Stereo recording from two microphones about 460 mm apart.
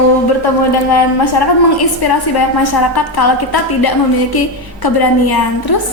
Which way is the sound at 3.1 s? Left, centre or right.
Left.